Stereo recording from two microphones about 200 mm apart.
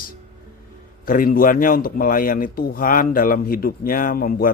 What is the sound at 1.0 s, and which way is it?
A man's voice, 45° left (ahead or behind).